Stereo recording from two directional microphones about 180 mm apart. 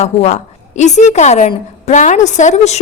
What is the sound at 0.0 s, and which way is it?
A woman's voice, 40° left (ahead or behind).